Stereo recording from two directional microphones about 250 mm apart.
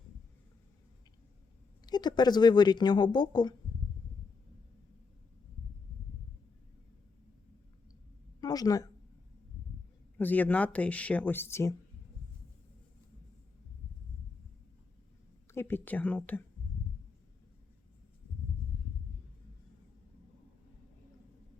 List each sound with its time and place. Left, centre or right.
1.9 s speech: centre
8.4 s a sound: centre
10.2 s speech: centre
15.5 s speech: centre